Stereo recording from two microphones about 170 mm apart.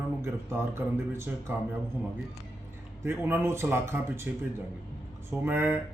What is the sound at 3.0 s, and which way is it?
A man's voice, 10° right (ahead or behind).